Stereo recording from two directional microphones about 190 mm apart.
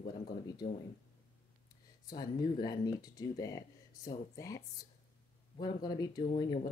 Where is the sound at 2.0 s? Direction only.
20° left (ahead or behind).